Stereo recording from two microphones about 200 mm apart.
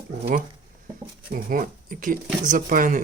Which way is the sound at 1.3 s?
45° right (ahead or behind).